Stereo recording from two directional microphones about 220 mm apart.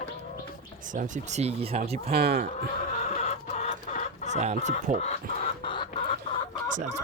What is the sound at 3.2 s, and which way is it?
Chicken, 30° left (ahead or behind).